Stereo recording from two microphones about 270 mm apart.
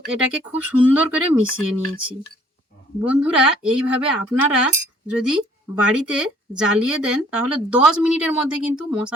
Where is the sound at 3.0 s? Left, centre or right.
Centre.